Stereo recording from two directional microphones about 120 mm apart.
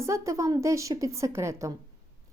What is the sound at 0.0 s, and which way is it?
A woman's voice, 25° right (ahead or behind).